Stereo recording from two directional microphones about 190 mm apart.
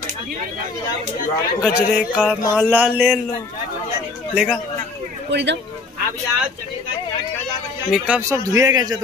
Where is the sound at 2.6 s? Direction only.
10° right (ahead or behind).